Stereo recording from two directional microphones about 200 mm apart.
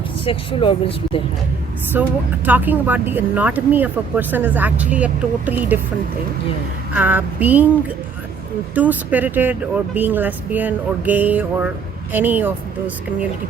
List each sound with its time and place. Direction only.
0.3 s speech: 25° left (ahead or behind)
1.9 s speech: 10° right (ahead or behind)
6.9 s speech: 10° right (ahead or behind)
8.7 s speech: 10° right (ahead or behind)